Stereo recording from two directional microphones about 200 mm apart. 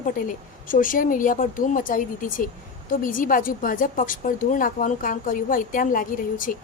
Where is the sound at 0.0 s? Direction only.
40° left (ahead or behind).